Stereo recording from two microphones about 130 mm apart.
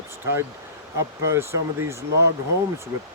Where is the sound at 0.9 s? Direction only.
20° right (ahead or behind).